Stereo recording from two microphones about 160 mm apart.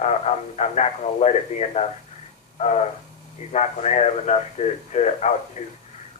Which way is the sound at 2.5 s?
45° left (ahead or behind).